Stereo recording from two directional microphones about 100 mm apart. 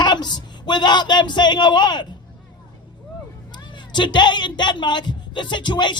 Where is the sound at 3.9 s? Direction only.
50° left (ahead or behind).